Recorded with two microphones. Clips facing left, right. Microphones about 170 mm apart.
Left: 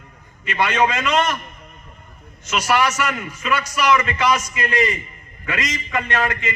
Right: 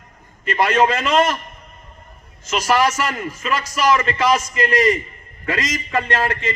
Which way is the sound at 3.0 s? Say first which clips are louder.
Right 1 dB; 30° right (ahead or behind).